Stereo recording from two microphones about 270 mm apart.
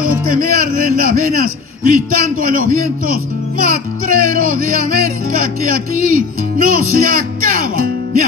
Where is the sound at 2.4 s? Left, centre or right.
Right.